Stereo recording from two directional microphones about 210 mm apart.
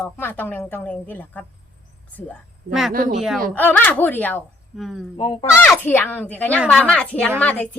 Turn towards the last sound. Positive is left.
turn(degrees=5)  # may be behind; listen again after turning